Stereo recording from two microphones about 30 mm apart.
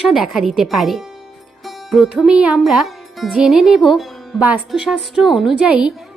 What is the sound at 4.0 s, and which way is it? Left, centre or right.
Music, centre.